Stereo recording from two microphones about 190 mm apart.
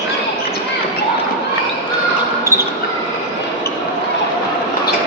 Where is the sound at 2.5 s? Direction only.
15° right (ahead or behind).